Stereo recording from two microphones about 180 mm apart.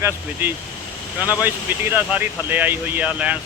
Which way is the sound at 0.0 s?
10° right (ahead or behind).